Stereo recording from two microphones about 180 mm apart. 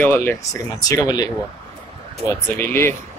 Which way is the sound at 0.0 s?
10° left (ahead or behind).